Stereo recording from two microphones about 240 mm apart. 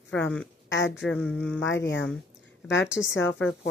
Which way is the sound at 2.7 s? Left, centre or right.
Left.